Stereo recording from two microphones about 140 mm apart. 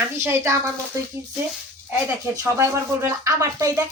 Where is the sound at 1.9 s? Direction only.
20° right (ahead or behind).